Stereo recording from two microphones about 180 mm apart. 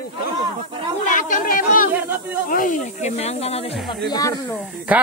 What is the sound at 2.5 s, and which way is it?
Speech, 50° left (ahead or behind).